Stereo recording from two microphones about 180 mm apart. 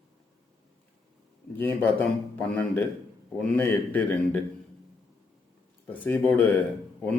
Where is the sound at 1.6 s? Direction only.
10° left (ahead or behind).